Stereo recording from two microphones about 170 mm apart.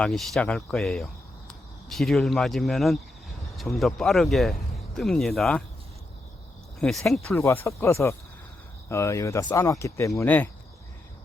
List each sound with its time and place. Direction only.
0.0 s speech: 5° left (ahead or behind)
6.8 s speech: centre (ahead or behind)
7.3 s speech: 15° left (ahead or behind)